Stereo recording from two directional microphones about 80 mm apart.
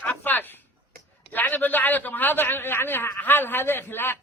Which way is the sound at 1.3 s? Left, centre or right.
Left.